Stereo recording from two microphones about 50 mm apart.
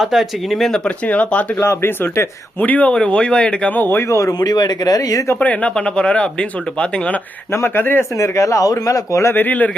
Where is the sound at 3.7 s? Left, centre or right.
Left.